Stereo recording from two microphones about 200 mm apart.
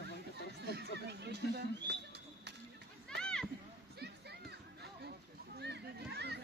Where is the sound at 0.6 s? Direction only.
55° right (ahead or behind).